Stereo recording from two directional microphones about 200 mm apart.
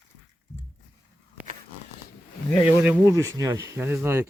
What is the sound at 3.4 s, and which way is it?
Speech, 15° right (ahead or behind).